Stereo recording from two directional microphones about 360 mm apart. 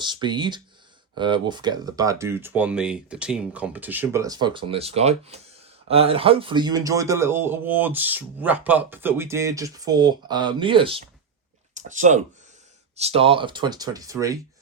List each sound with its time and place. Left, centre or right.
0.0 s a man's voice: centre